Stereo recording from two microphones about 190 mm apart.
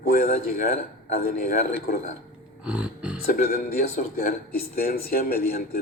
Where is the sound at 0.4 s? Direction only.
50° left (ahead or behind).